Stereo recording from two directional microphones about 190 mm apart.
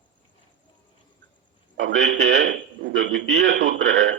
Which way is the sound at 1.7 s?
75° right (ahead or behind).